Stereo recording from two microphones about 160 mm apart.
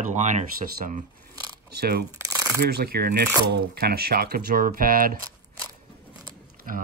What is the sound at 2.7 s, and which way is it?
Speech, 80° right.